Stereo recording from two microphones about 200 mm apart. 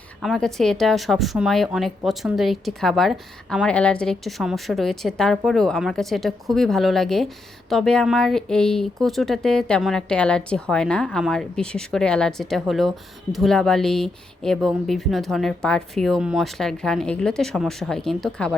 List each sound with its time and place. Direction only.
0.2 s a woman's voice: centre (ahead or behind)